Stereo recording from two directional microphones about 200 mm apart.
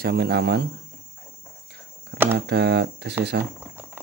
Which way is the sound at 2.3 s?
55° right (ahead or behind).